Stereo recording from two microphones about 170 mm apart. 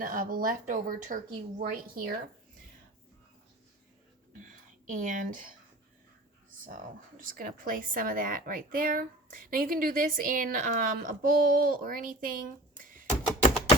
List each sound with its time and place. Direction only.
0.0 s speech: 50° right (ahead or behind)
4.4 s speech: 50° right (ahead or behind)
7.2 s a woman's voice: 55° right (ahead or behind)